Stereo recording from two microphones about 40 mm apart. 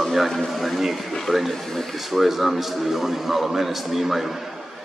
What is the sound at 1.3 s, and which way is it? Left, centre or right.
Speech, left.